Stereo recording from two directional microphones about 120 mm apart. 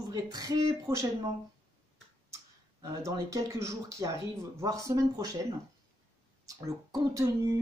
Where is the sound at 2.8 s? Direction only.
30° right (ahead or behind).